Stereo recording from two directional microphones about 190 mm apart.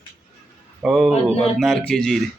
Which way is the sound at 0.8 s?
Centre (ahead or behind).